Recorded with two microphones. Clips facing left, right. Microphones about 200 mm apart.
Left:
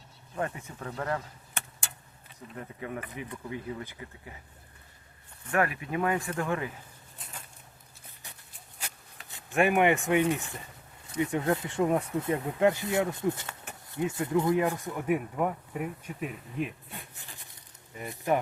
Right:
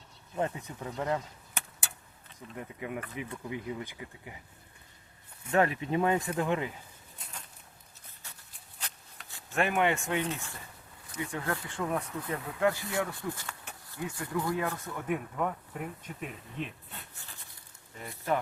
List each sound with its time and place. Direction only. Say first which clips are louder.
0.3 s speech: right 1 dB; 20° right (ahead or behind)
2.6 s speech: even; 15° right (ahead or behind)
5.5 s speech: right 2 dB; 25° right (ahead or behind)
8.8 s a sound: left 1 dB; 10° left (ahead or behind)
9.3 s speech: left 5 dB; 15° left (ahead or behind)